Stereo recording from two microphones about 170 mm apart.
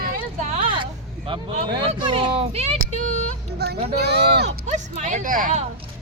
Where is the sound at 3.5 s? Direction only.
75° right (ahead or behind).